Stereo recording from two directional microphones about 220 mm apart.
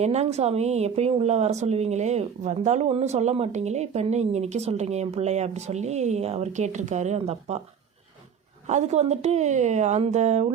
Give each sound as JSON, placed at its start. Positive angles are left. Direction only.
{"t": 0.0, "sound": "speech", "side_deg": -30}
{"t": 8.6, "sound": "a woman's voice", "side_deg": -30}